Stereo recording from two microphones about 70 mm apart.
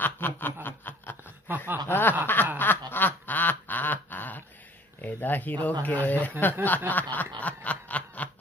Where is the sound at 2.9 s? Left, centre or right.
Left.